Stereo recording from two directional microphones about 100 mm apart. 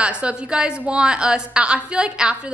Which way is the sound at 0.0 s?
10° right (ahead or behind).